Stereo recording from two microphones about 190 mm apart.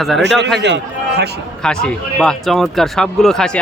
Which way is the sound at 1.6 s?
5° left (ahead or behind).